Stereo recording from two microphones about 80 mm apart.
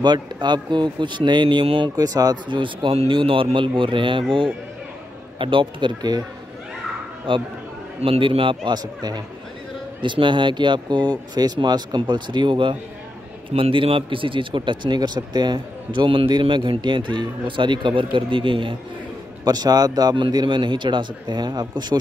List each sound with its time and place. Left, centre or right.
0.0 s speech: right
2.0 s a man's voice: right
2.4 s a man's voice: right
5.4 s a man's voice: right
7.3 s a man's voice: right
10.0 s speech: right
13.7 s a man's voice: right
15.0 s a man's voice: right
19.4 s a man's voice: right
20.2 s speech: right